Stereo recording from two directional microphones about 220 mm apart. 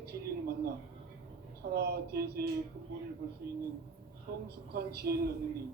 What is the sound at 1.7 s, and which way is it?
Speech, 45° right (ahead or behind).